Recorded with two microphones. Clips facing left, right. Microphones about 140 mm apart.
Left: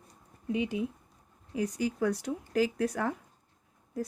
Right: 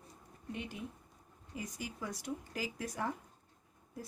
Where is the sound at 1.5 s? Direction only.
85° left.